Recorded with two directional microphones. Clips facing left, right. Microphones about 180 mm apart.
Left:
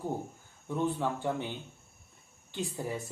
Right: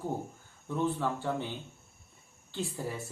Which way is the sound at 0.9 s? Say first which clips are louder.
Even; 15° left (ahead or behind).